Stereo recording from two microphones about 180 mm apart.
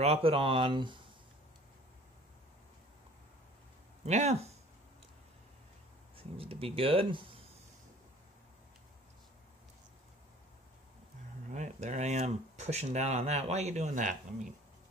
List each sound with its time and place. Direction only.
0.0 s speech: 35° right (ahead or behind)
4.0 s speech: 35° right (ahead or behind)
6.1 s speech: 30° right (ahead or behind)
11.5 s speech: 40° right (ahead or behind)